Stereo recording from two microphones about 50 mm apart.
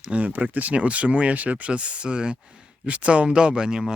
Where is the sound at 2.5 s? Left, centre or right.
Centre.